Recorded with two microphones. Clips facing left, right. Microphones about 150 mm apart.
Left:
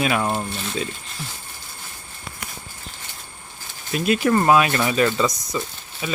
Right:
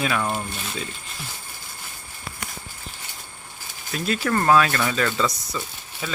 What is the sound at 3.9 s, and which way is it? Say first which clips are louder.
Speech: left 5 dB; 20° left (ahead or behind).